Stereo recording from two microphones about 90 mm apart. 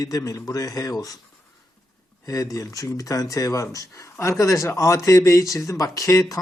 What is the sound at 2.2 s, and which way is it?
Speech, 40° left (ahead or behind).